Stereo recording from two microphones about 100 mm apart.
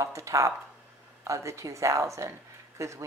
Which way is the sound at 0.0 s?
30° right (ahead or behind).